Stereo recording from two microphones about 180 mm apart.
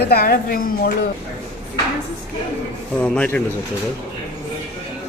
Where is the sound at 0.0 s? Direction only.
55° left (ahead or behind).